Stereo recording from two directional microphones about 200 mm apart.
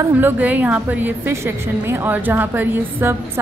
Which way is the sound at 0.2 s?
10° right (ahead or behind).